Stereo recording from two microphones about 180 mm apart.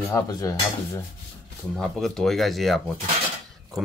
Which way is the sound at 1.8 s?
Centre (ahead or behind).